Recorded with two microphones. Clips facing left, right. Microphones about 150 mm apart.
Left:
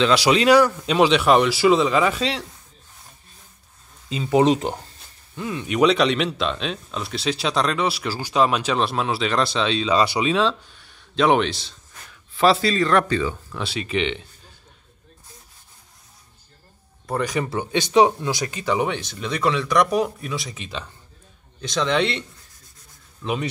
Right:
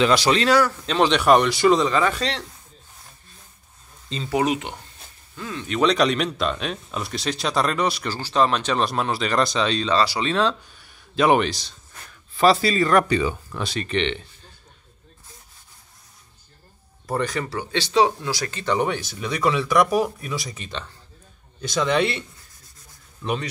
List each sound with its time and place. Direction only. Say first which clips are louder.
0.1 s speech: left 3 dB; 5° left (ahead or behind)
4.3 s speech: left 5 dB; 30° left (ahead or behind)
5.3 s speech: left 3 dB; 15° left (ahead or behind)
5.9 s speech: even; centre (ahead or behind)
9.9 s speech: left 2 dB; 20° left (ahead or behind)
10.2 s a man's voice: left 1 dB; centre (ahead or behind)
13.6 s speech: left 1 dB; 5° left (ahead or behind)
17.2 s speech: left 4 dB; 15° left (ahead or behind); by 22.2 s 5° right (ahead or behind)
23.2 s speech: even; 5° right (ahead or behind)